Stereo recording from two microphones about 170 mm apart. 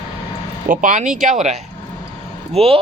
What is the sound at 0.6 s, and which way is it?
Speech, 50° right (ahead or behind).